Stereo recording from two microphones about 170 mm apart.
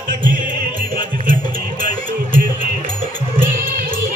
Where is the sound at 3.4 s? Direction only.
55° right (ahead or behind).